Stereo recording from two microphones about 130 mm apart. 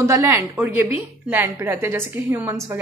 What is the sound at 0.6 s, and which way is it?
A woman's voice, 15° right (ahead or behind).